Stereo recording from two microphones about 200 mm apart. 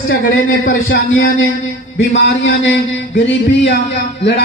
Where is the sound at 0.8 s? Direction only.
75° left (ahead or behind).